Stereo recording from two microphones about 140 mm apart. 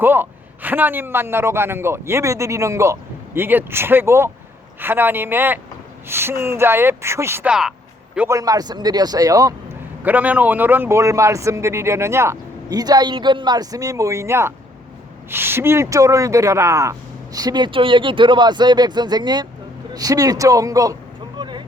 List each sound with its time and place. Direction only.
0.0 s a man's voice: 15° right (ahead or behind)
10.0 s a man's voice: 10° right (ahead or behind)
21.3 s vehicle: 35° right (ahead or behind)